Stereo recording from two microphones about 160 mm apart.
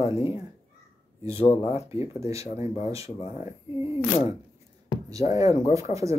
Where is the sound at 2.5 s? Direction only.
40° left (ahead or behind).